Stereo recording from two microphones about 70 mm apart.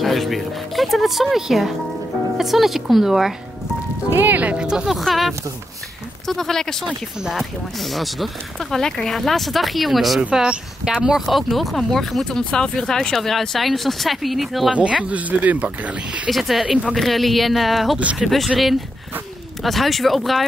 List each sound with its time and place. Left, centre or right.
0.0 s speech: centre
4.1 s speech: right; by 7.0 s centre
7.2 s speech: centre
14.7 s speech: centre
16.3 s speech: centre
19.6 s speech: centre